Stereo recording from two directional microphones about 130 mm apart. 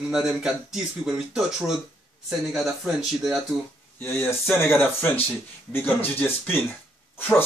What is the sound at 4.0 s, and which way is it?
Speech, 20° left (ahead or behind).